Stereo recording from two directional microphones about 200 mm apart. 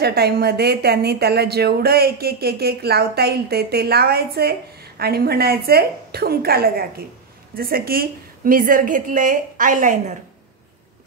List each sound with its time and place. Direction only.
0.0 s a woman's voice: 50° right (ahead or behind)